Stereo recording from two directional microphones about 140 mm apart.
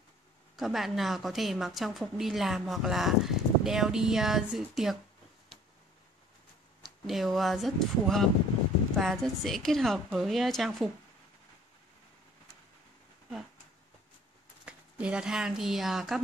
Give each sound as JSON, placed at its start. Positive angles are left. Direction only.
{"t": 0.6, "sound": "a woman's voice", "side_deg": 0}
{"t": 6.8, "sound": "a woman's voice", "side_deg": 0}
{"t": 14.6, "sound": "speech", "side_deg": -10}